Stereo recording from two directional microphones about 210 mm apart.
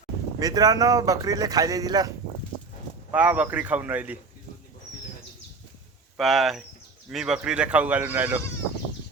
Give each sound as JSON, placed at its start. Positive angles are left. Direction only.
{"t": 0.3, "sound": "speech", "side_deg": -15}
{"t": 6.1, "sound": "speech", "side_deg": 0}